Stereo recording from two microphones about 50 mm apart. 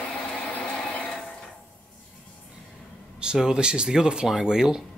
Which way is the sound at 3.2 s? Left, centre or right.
Centre.